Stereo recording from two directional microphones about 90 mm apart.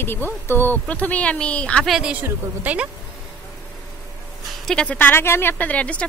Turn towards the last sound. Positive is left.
turn(degrees=15)  # may be behind; listen again after turning